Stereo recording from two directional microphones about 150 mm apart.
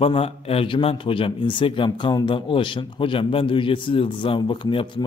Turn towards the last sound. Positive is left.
turn(degrees=35)  # may be behind; listen again after turning